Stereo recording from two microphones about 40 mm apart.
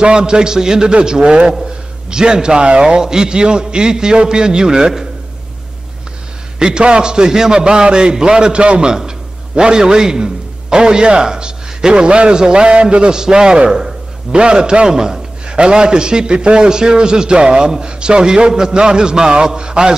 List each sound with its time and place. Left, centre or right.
0.0 s a man's voice: right
6.6 s a man's voice: right